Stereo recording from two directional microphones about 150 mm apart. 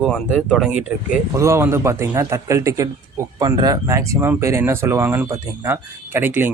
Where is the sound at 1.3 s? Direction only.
20° right (ahead or behind).